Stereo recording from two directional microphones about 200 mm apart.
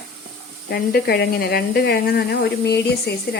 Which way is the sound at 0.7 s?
50° left (ahead or behind).